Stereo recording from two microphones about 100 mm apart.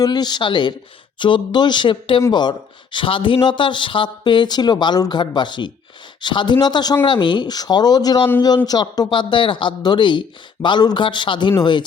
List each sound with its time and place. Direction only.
0.0 s speech: 45° left (ahead or behind)